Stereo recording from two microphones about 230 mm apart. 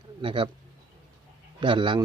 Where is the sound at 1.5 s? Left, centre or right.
Right.